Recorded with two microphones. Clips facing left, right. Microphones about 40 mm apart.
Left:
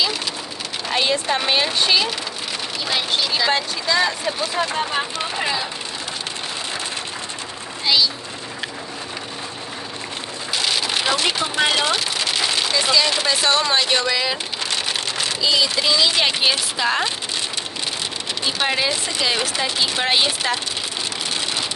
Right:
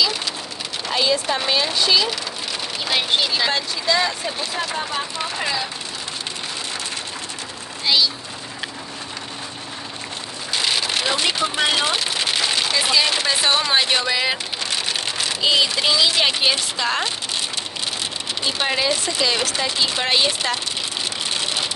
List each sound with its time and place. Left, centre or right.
0.9 s speech: left
2.9 s speech: right
4.4 s speech: left
5.2 s speech: centre
7.8 s speech: centre
11.0 s a woman's voice: centre
12.7 s speech: centre
15.4 s speech: right
16.0 s a woman's voice: centre
18.6 s speech: centre